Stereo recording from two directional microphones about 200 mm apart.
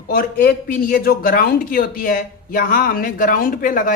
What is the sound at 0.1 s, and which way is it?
A man's voice, 45° left (ahead or behind).